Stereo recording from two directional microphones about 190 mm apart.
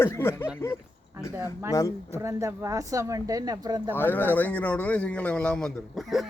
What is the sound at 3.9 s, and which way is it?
Speech, 10° left (ahead or behind).